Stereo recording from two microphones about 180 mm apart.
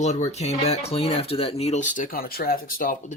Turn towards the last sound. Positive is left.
turn(degrees=50)  # may be behind; listen again after turning